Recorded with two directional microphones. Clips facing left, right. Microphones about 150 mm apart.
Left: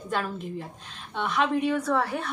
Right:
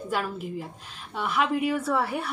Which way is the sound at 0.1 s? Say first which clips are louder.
Even; 5° right (ahead or behind).